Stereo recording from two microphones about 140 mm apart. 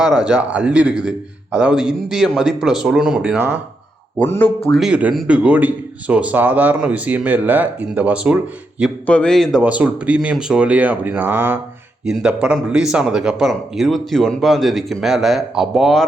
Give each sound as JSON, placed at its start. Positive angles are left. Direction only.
{"t": 0.0, "sound": "a man's voice", "side_deg": -5}
{"t": 4.2, "sound": "speech", "side_deg": 15}
{"t": 4.7, "sound": "a man's voice", "side_deg": -5}
{"t": 9.0, "sound": "a man's voice", "side_deg": 5}
{"t": 9.6, "sound": "a man's voice", "side_deg": -10}